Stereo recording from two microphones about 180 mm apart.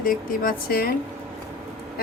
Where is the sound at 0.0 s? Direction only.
50° left (ahead or behind).